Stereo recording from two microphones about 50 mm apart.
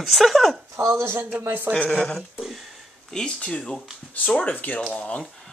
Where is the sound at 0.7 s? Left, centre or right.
Right.